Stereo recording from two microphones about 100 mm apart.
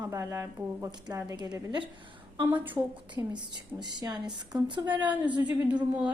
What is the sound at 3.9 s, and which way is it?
Speech, 45° right (ahead or behind).